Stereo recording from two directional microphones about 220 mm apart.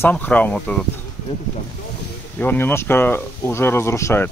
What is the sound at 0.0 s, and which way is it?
Speech, 5° left (ahead or behind).